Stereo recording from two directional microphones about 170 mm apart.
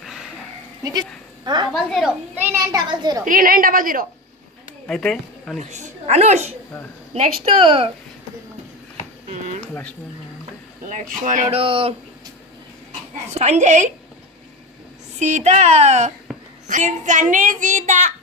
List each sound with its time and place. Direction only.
0.0 s sheep: centre (ahead or behind)
0.8 s speech: 25° right (ahead or behind)
1.7 s a woman's voice: centre (ahead or behind)
2.3 s a child's voice: 15° right (ahead or behind)
3.3 s a woman's voice: 55° right (ahead or behind)
4.8 s speech: 5° left (ahead or behind)
5.6 s a woman's voice: 45° right (ahead or behind)
7.6 s a woman's voice: 30° right (ahead or behind)
9.6 s a sound: 5° left (ahead or behind)
10.8 s a child's voice: 50° right (ahead or behind); by 11.9 s 30° right (ahead or behind)
13.3 s a child's voice: 40° right (ahead or behind)
15.1 s a woman's voice: 40° right (ahead or behind)